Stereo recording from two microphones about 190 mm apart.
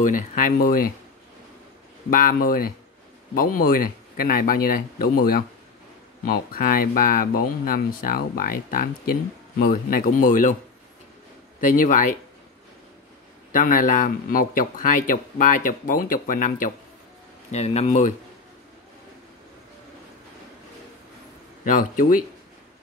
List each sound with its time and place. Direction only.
0.0 s a man's voice: 45° left (ahead or behind)
2.0 s a man's voice: 50° left (ahead or behind)
11.6 s a man's voice: 45° left (ahead or behind)
13.5 s a man's voice: 45° left (ahead or behind)
17.5 s speech: 35° left (ahead or behind)
21.6 s a man's voice: 45° left (ahead or behind)